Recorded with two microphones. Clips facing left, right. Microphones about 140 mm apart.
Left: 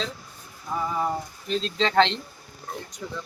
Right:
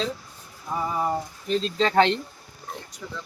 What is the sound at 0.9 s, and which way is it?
Speech, 5° right (ahead or behind).